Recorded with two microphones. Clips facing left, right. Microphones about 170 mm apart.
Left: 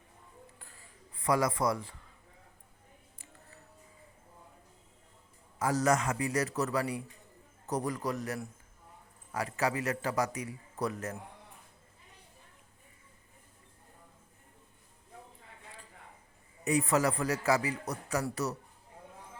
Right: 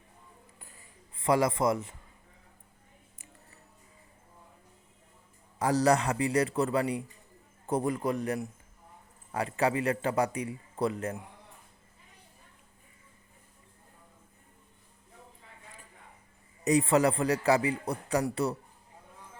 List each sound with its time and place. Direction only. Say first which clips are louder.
1.2 s a man's voice: right 3 dB; 25° right (ahead or behind)
5.5 s a man's voice: right 3 dB; 35° right (ahead or behind)
16.6 s a man's voice: right 4 dB; 30° right (ahead or behind)